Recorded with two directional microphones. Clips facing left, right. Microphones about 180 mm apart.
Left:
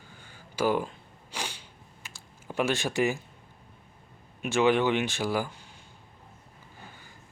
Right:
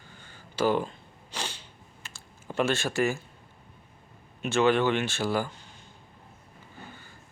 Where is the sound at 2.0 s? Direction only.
10° left (ahead or behind).